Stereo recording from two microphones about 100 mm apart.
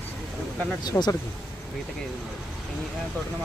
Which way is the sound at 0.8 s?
40° left (ahead or behind).